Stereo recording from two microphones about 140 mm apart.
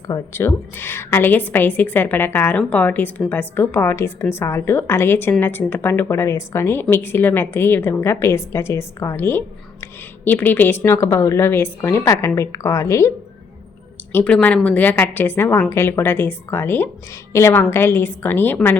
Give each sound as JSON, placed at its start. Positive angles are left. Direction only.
{"t": 0.3, "sound": "a woman's voice", "side_deg": 15}